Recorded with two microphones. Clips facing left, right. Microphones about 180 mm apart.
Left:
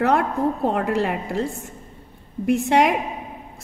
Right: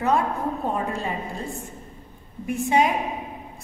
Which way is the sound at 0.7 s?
80° left.